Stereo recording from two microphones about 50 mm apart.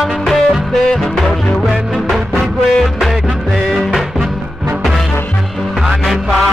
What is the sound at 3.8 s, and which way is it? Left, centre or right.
Music, centre.